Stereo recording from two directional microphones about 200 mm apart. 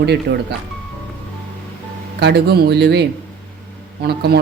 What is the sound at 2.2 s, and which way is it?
Speech, 55° right (ahead or behind).